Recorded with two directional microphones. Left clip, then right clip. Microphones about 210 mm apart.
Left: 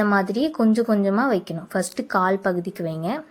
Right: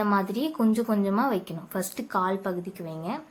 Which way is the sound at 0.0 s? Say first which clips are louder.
Left 5 dB; 25° left (ahead or behind).